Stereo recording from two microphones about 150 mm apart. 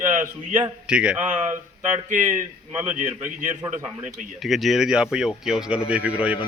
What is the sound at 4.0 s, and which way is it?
Speech, 55° right (ahead or behind).